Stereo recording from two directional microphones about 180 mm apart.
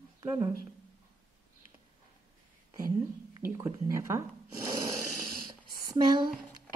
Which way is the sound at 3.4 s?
15° right (ahead or behind).